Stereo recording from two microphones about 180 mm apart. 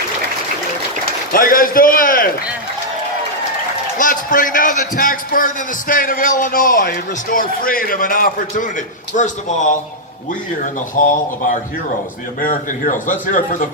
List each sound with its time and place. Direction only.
1.3 s a man's voice: 50° left (ahead or behind)
3.9 s a man's voice: 50° left (ahead or behind)
10.8 s a man's voice: 45° left (ahead or behind)